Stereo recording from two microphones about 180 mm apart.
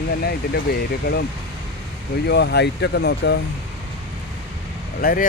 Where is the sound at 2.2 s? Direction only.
70° left (ahead or behind).